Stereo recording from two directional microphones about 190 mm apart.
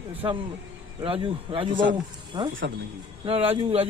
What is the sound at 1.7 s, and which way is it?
Speech, 75° right (ahead or behind).